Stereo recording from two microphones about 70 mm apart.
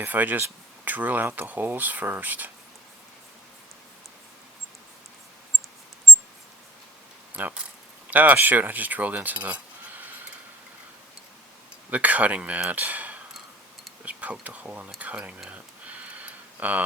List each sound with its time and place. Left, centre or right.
0.0 s speech: right
7.3 s speech: right
11.9 s speech: right
15.4 s tick-tock: centre